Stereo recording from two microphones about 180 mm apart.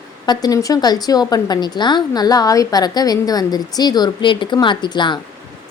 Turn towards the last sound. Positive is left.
turn(degrees=25)  # may be behind; listen again after turning